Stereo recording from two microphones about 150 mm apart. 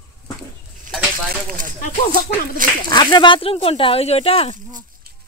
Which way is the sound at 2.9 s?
30° left (ahead or behind).